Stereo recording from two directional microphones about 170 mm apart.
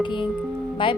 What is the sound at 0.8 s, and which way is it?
Speech, 30° left (ahead or behind).